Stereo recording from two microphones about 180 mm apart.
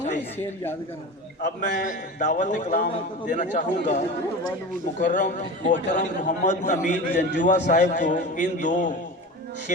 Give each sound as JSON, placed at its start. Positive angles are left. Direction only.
{"t": 1.5, "sound": "a man's voice", "side_deg": 45}